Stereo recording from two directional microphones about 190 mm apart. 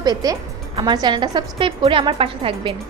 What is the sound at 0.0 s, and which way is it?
A woman's voice, 20° right (ahead or behind).